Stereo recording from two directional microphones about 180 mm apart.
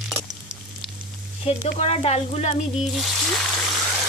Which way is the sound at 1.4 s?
35° left (ahead or behind).